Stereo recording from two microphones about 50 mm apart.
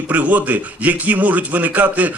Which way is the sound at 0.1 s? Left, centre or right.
Right.